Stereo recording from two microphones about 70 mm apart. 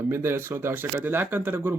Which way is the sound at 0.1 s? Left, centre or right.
Right.